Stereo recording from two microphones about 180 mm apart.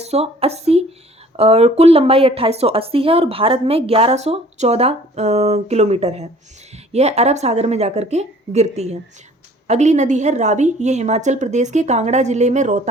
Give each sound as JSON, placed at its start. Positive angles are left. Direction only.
{"t": 0.0, "sound": "a woman's voice", "side_deg": -35}